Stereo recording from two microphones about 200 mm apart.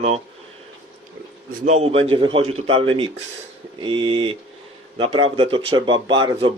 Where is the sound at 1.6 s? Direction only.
35° right (ahead or behind).